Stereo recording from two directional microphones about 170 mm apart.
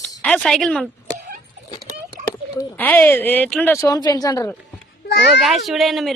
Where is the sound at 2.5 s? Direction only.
10° left (ahead or behind).